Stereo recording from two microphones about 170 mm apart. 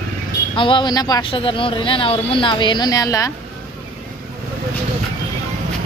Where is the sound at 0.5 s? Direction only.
30° left (ahead or behind).